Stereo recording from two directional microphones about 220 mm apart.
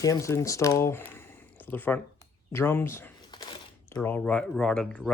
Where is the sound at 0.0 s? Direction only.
15° left (ahead or behind).